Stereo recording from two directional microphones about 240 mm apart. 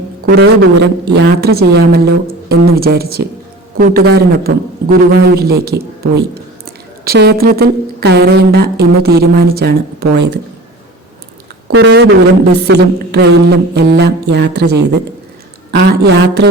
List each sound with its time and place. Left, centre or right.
0.3 s speech: right
11.7 s speech: right
12.5 s a woman's voice: right